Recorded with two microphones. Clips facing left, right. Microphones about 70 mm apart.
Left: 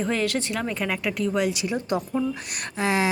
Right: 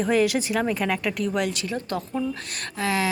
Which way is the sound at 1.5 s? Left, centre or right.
Centre.